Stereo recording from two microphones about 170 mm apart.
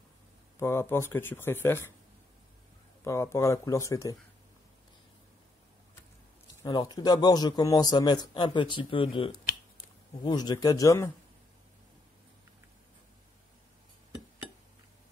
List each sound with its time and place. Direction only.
0.6 s speech: 15° left (ahead or behind)
3.0 s speech: 15° left (ahead or behind)
6.6 s a man's voice: 25° left (ahead or behind)